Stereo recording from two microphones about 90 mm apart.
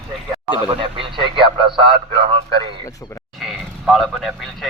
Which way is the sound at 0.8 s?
75° right (ahead or behind).